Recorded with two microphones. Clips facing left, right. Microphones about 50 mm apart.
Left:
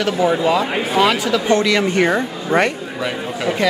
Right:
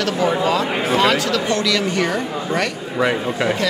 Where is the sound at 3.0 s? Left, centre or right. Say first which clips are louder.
Right 8 dB; centre.